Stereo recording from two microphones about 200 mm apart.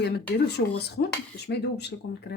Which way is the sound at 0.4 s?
55° left (ahead or behind).